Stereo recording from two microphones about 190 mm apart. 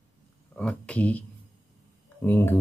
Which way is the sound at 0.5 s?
5° left (ahead or behind).